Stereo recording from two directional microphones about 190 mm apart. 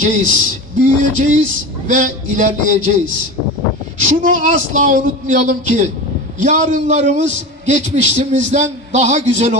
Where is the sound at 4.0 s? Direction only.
45° right (ahead or behind).